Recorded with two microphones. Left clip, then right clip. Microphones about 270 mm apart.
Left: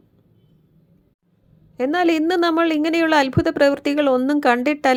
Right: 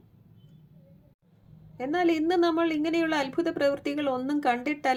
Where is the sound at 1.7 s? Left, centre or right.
Left.